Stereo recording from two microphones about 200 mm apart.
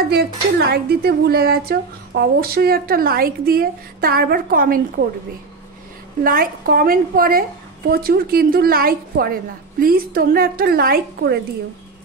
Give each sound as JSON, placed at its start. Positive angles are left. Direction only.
{"t": 0.1, "sound": "a woman's voice", "side_deg": -55}
{"t": 6.2, "sound": "a woman's voice", "side_deg": -45}